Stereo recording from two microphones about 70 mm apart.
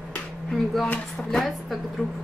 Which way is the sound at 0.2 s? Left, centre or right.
Centre.